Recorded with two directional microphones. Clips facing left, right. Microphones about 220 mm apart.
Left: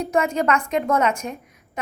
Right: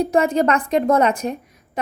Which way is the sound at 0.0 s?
35° right (ahead or behind).